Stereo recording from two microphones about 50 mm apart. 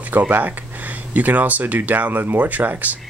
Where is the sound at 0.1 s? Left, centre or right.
Right.